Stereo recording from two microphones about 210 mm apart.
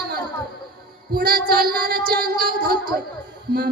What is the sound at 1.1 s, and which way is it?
Child singing, 45° right (ahead or behind).